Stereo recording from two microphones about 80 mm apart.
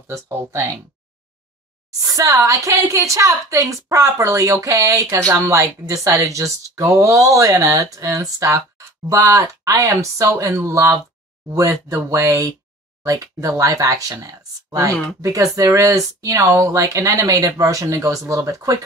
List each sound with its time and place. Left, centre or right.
0.1 s a woman's voice: right
2.0 s a woman's voice: right